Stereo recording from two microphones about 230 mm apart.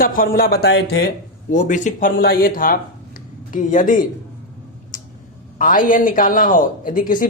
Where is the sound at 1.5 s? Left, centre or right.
Left.